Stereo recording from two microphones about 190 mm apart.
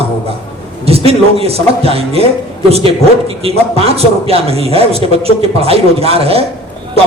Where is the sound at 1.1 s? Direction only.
30° right (ahead or behind).